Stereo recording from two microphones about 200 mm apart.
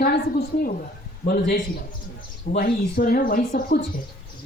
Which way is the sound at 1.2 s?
55° left (ahead or behind).